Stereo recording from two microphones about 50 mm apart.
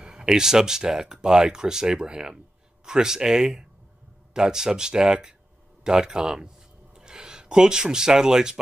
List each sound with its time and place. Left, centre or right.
0.0 s speech: centre